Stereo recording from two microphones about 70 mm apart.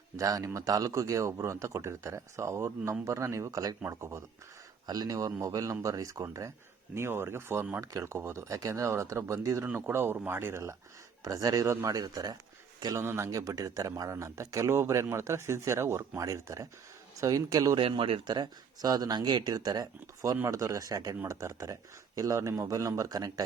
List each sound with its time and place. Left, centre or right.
0.2 s speech: right
3.8 s speech: right
4.9 s speech: right
6.9 s speech: right
8.4 s speech: right
11.2 s speech: right
11.9 s speech: right
13.0 s speech: right
13.2 s speech: right
18.3 s speech: right
20.5 s speech: right